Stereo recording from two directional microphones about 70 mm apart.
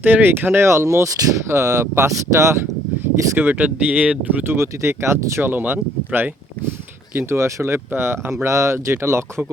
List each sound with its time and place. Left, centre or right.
0.0 s speech: right
3.0 s speech: right
4.4 s speech: right
7.2 s speech: right